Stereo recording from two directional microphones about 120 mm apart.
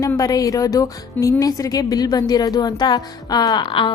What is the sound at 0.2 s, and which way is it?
A woman's voice, 30° left (ahead or behind).